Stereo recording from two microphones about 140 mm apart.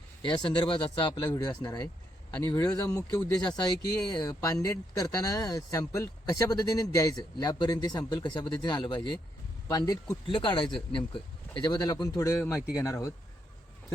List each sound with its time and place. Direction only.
0.2 s speech: 35° left (ahead or behind)